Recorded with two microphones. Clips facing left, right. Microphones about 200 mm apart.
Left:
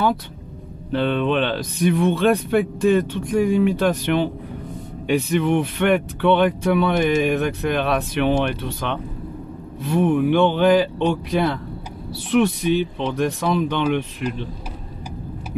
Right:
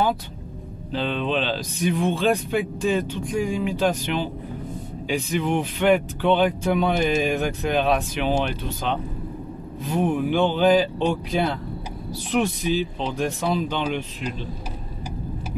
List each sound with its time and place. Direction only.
0.9 s speech: 60° left (ahead or behind)